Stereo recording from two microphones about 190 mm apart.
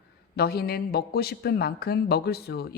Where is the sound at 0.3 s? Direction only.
55° left (ahead or behind).